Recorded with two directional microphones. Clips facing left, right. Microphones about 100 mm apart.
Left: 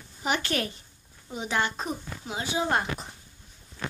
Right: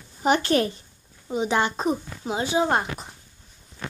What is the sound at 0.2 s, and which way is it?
Speech, 35° right (ahead or behind).